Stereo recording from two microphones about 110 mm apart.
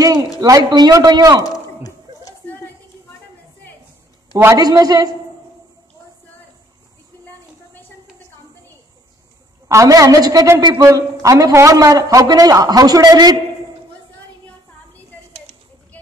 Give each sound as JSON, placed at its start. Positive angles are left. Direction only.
{"t": 0.4, "sound": "a man's voice", "side_deg": -35}
{"t": 1.4, "sound": "a sound", "side_deg": 35}
{"t": 4.6, "sound": "a man's voice", "side_deg": -35}
{"t": 9.7, "sound": "a man's voice", "side_deg": -30}